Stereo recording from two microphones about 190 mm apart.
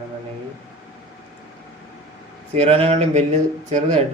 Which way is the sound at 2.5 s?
35° right (ahead or behind).